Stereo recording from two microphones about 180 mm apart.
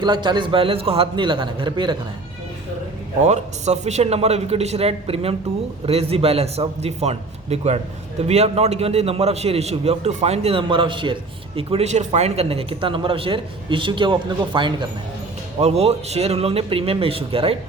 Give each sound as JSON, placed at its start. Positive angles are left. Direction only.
{"t": 0.0, "sound": "a man's voice", "side_deg": -25}
{"t": 3.2, "sound": "a man's voice", "side_deg": -40}